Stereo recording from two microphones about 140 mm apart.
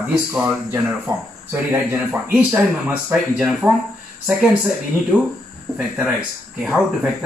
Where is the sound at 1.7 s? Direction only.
10° right (ahead or behind).